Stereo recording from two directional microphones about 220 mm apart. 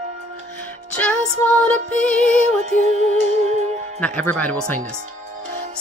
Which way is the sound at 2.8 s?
30° right (ahead or behind).